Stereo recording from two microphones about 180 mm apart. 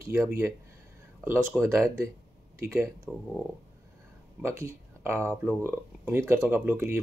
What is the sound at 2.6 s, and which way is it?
Speech, 10° right (ahead or behind).